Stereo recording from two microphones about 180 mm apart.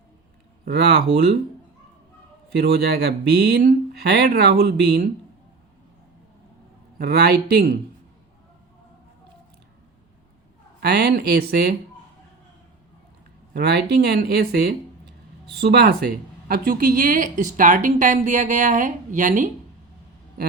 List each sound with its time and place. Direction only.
0.6 s speech: 60° right (ahead or behind)
2.6 s speech: 60° right (ahead or behind)
7.0 s speech: 60° right (ahead or behind)
10.8 s speech: 65° right (ahead or behind)
13.5 s speech: 65° right (ahead or behind); by 19.5 s 45° right (ahead or behind)